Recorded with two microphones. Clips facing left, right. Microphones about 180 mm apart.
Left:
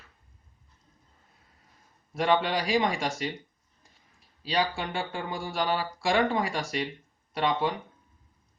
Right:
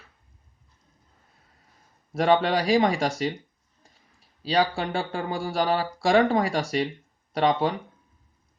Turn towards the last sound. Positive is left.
turn(degrees=-35)  # may be behind; listen again after turning